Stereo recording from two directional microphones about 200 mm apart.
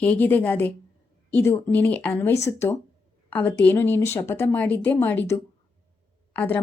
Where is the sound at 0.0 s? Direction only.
10° left (ahead or behind).